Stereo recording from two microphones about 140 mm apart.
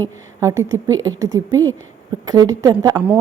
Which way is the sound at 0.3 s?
20° right (ahead or behind).